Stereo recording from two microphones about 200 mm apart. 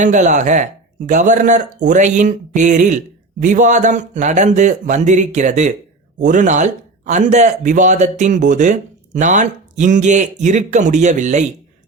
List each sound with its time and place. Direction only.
0.0 s speech: 40° right (ahead or behind)